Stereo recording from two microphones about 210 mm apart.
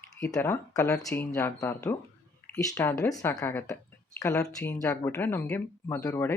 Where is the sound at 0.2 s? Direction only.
15° left (ahead or behind).